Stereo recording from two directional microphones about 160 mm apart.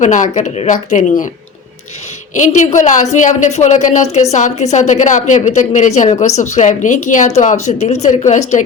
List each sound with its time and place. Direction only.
0.0 s a woman's voice: 50° left (ahead or behind)
2.3 s a woman's voice: 50° left (ahead or behind)